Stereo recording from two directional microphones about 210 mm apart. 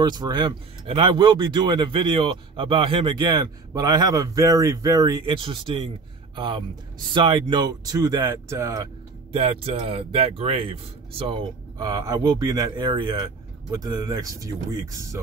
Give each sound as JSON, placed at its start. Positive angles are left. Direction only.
{"t": 0.0, "sound": "speech", "side_deg": -20}
{"t": 9.3, "sound": "speech", "side_deg": -25}